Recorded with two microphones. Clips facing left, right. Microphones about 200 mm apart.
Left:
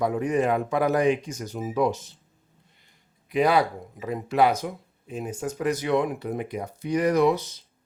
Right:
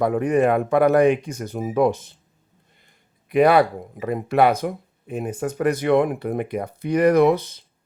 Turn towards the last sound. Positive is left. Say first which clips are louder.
# right 5 dB
turn(degrees=-55)  # may be behind; listen again after turning